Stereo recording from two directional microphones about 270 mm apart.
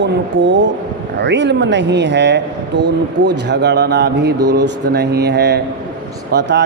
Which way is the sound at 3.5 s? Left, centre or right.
Right.